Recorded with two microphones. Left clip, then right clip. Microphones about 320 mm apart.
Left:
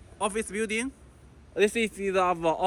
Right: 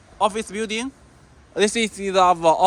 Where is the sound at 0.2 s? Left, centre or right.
Centre.